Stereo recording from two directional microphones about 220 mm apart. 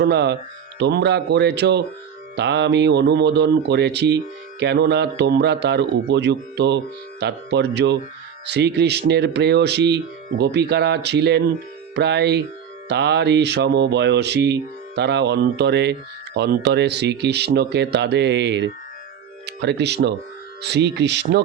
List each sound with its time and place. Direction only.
0.0 s speech: 50° right (ahead or behind)